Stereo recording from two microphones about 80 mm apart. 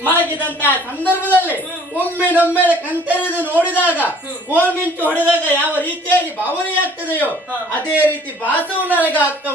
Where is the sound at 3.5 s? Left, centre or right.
Centre.